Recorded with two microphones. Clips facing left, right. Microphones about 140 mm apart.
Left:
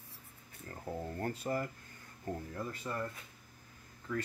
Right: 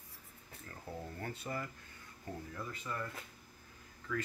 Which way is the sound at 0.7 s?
40° left (ahead or behind).